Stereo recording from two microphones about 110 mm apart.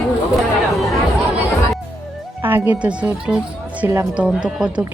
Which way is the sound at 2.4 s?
15° right (ahead or behind).